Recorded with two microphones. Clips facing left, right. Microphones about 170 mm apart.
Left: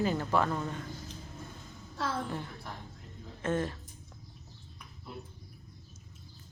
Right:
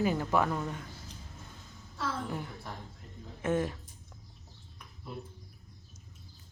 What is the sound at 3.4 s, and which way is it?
Speech, 15° right (ahead or behind).